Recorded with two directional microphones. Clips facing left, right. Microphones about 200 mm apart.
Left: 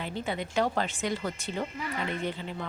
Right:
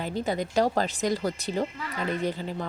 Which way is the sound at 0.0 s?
40° right (ahead or behind).